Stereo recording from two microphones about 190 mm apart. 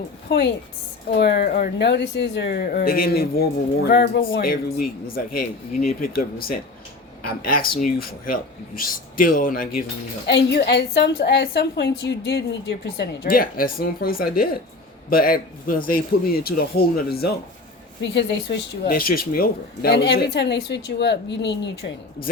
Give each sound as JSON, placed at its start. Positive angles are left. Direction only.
{"t": 0.3, "sound": "a woman's voice", "side_deg": 60}
{"t": 10.2, "sound": "a woman's voice", "side_deg": 65}